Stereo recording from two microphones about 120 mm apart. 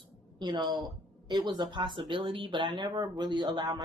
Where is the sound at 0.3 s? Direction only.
40° right (ahead or behind).